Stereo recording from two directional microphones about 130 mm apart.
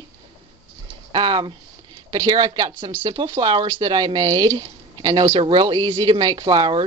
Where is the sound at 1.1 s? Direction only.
35° right (ahead or behind).